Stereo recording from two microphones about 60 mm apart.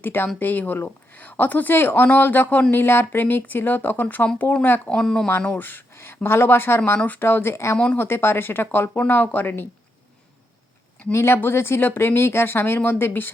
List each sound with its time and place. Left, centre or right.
0.0 s speech: left
2.7 s speech: left
4.9 s speech: centre
5.5 s speech: left
11.0 s speech: left